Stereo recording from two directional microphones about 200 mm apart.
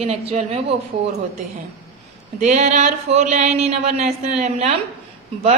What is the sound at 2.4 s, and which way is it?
Speech, 35° right (ahead or behind).